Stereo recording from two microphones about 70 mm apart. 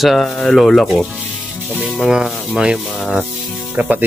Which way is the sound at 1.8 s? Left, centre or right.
Centre.